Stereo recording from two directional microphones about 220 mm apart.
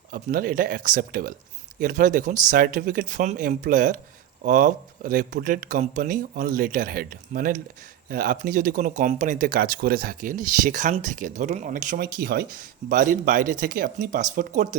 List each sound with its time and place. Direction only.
0.1 s speech: 40° right (ahead or behind)